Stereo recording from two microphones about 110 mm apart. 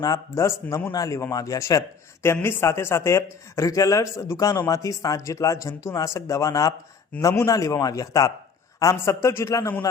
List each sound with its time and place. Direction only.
0.0 s speech: 30° left (ahead or behind)